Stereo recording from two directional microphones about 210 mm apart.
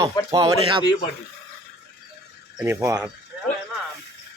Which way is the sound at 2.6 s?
10° right (ahead or behind).